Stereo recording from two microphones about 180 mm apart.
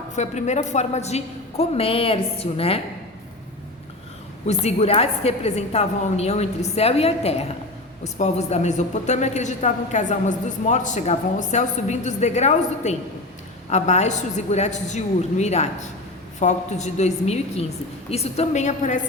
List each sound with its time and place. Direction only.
0.2 s a woman's voice: 40° left (ahead or behind)
4.4 s a woman's voice: 35° left (ahead or behind)